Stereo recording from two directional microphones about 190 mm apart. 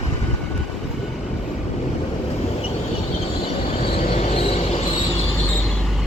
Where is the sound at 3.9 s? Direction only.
35° left (ahead or behind).